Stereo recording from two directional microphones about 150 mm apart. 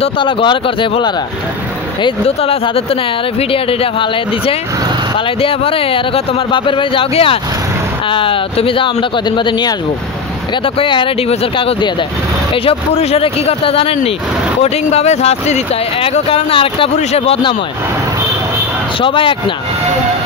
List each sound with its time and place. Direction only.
0.0 s speech: 35° left (ahead or behind)
18.9 s speech: 35° left (ahead or behind)